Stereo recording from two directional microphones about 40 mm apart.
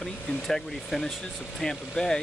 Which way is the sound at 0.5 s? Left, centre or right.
Centre.